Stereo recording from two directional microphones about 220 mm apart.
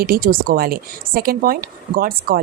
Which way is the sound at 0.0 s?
40° right (ahead or behind).